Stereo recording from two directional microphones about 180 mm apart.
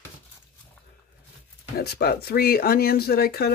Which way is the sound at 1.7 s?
65° left (ahead or behind).